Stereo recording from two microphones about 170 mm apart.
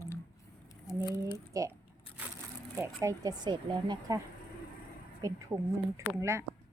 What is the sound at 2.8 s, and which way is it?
Speech, 20° right (ahead or behind).